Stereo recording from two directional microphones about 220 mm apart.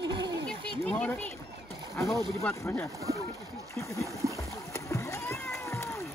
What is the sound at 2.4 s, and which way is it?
Speech, 10° left (ahead or behind).